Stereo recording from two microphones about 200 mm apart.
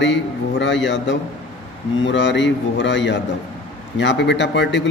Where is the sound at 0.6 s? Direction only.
65° left (ahead or behind).